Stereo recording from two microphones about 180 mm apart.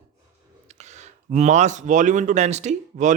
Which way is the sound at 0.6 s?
40° right (ahead or behind).